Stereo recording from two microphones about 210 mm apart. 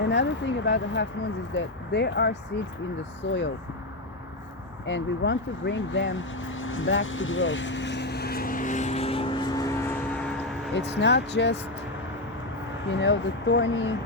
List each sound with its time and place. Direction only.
0.0 s speech: 55° left (ahead or behind)
4.9 s vehicle: 60° left (ahead or behind); by 10.0 s 10° left (ahead or behind)
10.8 s speech: 55° left (ahead or behind)
12.9 s speech: 60° left (ahead or behind)